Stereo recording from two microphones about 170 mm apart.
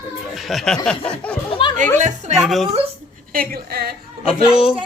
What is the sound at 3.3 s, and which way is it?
Speech, 60° right (ahead or behind).